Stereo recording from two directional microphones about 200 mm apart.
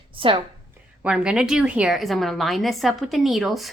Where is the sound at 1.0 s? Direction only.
5° right (ahead or behind).